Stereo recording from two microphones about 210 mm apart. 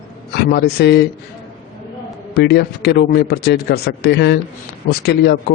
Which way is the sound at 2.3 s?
50° left (ahead or behind).